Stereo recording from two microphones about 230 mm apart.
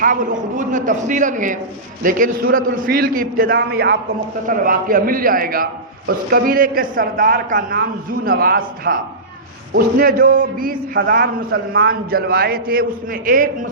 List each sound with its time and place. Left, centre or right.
0.0 s a man's voice: right